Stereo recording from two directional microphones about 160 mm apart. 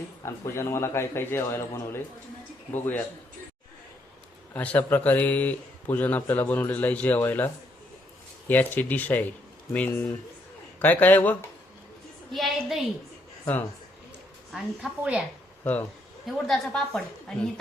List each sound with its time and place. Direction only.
0.2 s speech: 15° left (ahead or behind)
4.5 s speech: 10° left (ahead or behind)
12.3 s a woman's voice: centre (ahead or behind)
14.5 s a woman's voice: 5° right (ahead or behind)
15.6 s a woman's voice: 10° left (ahead or behind)